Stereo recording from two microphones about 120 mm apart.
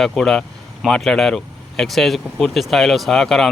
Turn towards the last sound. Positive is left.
turn(degrees=5)  # may be behind; listen again after turning